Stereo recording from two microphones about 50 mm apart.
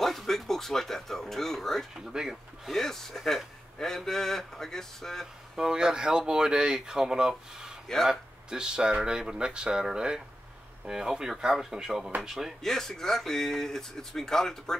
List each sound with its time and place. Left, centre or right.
0.0 s speech: centre
2.0 s speech: centre
2.7 s speech: centre
5.2 s speech: centre
12.6 s speech: centre